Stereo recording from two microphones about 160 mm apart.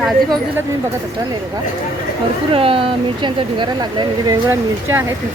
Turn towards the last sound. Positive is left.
turn(degrees=-15)  # may be behind; listen again after turning